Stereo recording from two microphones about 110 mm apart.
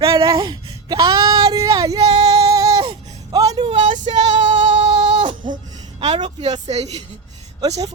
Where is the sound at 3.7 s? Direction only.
90° right.